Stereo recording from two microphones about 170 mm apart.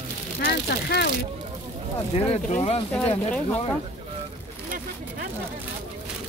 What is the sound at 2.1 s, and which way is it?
Speech, 40° left (ahead or behind).